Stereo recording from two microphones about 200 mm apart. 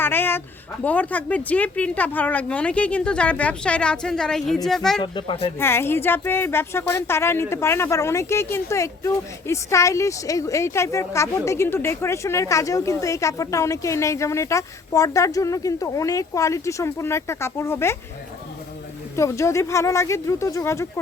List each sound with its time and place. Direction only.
0.0 s a sound: 10° left (ahead or behind)
0.9 s speech: 5° left (ahead or behind)
5.1 s speech: 25° left (ahead or behind)
5.5 s speech: 10° left (ahead or behind)
19.1 s speech: 15° left (ahead or behind)